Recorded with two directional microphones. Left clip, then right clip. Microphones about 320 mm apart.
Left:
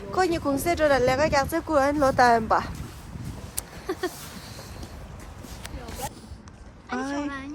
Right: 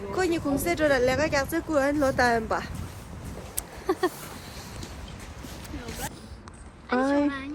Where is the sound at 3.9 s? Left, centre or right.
Right.